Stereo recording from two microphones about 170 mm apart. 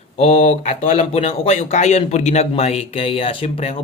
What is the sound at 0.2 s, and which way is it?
Speech, 35° left (ahead or behind).